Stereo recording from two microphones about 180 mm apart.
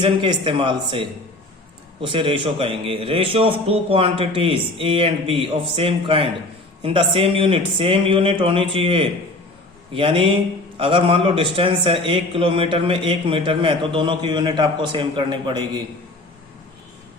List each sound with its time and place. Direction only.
0.0 s a man's voice: 25° right (ahead or behind)